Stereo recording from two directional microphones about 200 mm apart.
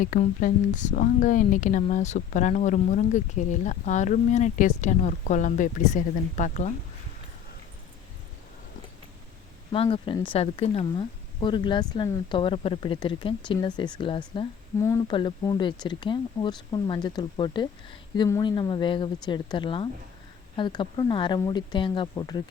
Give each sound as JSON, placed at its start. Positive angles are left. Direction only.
{"t": 0.0, "sound": "speech", "side_deg": 40}
{"t": 9.7, "sound": "speech", "side_deg": 25}
{"t": 14.8, "sound": "speech", "side_deg": 15}